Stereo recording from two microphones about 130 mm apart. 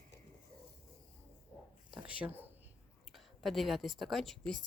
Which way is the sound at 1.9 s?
10° right (ahead or behind).